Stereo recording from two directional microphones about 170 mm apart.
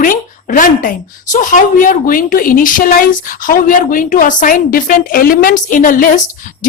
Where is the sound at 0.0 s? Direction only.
55° left (ahead or behind).